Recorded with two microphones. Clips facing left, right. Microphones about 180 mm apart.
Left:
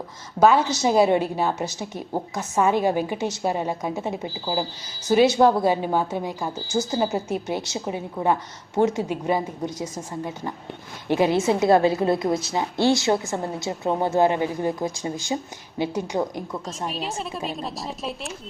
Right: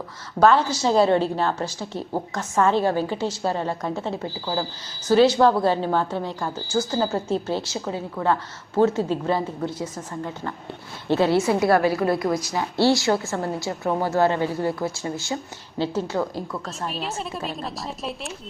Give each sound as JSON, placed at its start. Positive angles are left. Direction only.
{"t": 0.3, "sound": "a woman's voice", "side_deg": 10}
{"t": 16.9, "sound": "a woman's voice", "side_deg": 0}